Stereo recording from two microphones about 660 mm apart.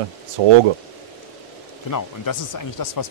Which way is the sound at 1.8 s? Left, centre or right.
Left.